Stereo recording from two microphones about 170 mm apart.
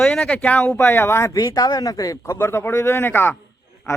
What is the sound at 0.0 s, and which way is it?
Speech, 5° left (ahead or behind).